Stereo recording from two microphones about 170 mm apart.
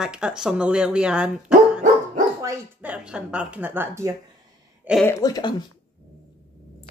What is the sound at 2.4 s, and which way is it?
Speech, 10° right (ahead or behind).